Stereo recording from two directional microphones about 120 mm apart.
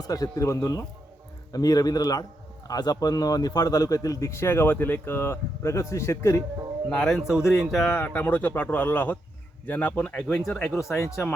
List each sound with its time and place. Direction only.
0.0 s a man's voice: 30° left (ahead or behind)
6.9 s speech: 5° left (ahead or behind)
8.0 s speech: 15° left (ahead or behind); by 11.2 s centre (ahead or behind)